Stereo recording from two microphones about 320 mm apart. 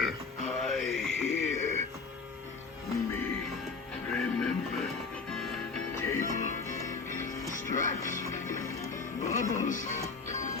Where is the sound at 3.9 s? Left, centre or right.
Centre.